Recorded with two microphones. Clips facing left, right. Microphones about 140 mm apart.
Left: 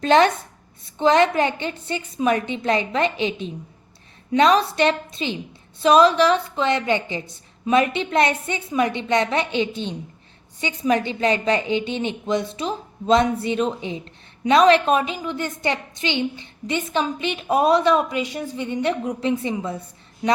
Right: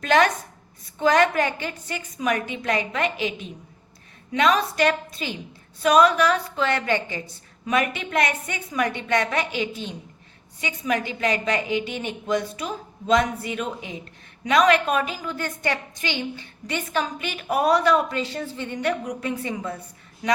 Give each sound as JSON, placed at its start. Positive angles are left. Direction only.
{"t": 0.0, "sound": "a woman's voice", "side_deg": 25}